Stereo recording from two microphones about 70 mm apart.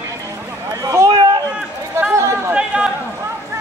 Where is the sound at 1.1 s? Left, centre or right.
Right.